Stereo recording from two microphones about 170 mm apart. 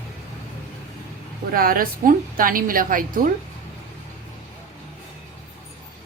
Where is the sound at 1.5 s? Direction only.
60° right (ahead or behind).